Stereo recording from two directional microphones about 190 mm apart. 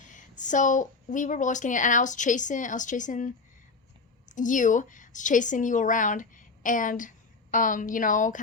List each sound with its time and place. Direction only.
0.0 s a woman's voice: 40° left (ahead or behind)